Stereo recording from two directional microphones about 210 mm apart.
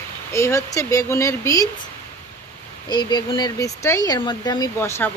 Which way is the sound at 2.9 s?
20° left (ahead or behind).